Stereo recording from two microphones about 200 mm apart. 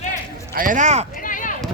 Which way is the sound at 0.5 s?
40° right (ahead or behind).